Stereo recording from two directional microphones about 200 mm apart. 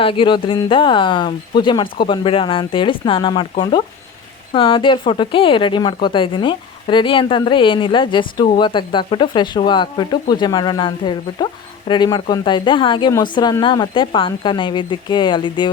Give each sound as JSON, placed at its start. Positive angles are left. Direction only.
{"t": 0.0, "sound": "a woman's voice", "side_deg": 25}